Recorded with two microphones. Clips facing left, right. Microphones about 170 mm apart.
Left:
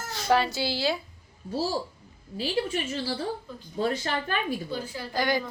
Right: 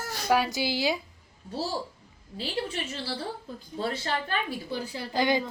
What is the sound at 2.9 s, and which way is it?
Speech, 40° left (ahead or behind).